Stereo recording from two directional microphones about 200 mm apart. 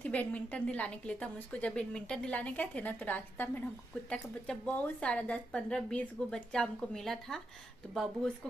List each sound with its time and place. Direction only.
0.0 s a woman's voice: 5° left (ahead or behind)